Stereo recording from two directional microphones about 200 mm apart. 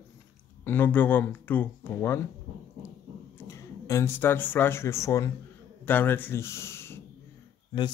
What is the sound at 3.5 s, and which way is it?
Speech, 15° left (ahead or behind).